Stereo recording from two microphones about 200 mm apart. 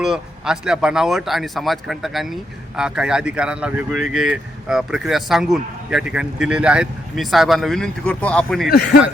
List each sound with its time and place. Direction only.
0.0 s speech: 5° right (ahead or behind)
8.7 s speech: 50° left (ahead or behind)